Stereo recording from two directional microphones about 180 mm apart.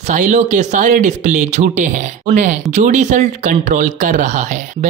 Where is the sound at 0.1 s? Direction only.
40° right (ahead or behind).